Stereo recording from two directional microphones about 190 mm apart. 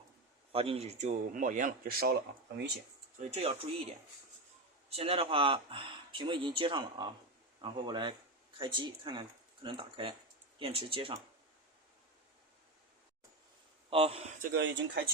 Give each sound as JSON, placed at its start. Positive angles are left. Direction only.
{"t": 0.5, "sound": "speech", "side_deg": -30}
{"t": 3.2, "sound": "speech", "side_deg": -35}
{"t": 4.9, "sound": "speech", "side_deg": -30}
{"t": 13.9, "sound": "speech", "side_deg": -30}
{"t": 14.3, "sound": "speech", "side_deg": -55}